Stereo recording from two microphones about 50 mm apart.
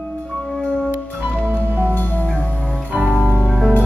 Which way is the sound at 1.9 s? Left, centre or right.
Left.